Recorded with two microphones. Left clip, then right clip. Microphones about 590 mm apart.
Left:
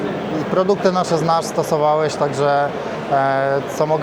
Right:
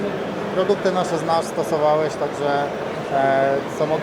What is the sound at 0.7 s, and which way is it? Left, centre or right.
Speech, left.